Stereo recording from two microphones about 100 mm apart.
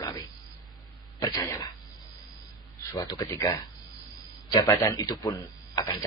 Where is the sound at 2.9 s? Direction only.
35° left (ahead or behind).